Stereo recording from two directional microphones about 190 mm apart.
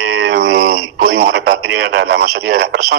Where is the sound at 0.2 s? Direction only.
90° right.